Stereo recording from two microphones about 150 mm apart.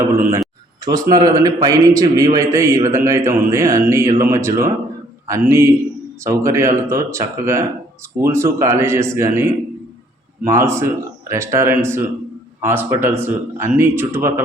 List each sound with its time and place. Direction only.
0.0 s a man's voice: 20° right (ahead or behind)